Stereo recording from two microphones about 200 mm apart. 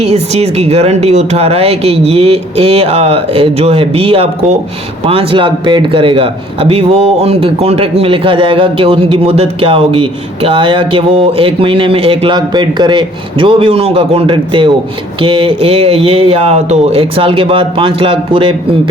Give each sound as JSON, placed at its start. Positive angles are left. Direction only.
{"t": 0.0, "sound": "a man's voice", "side_deg": -30}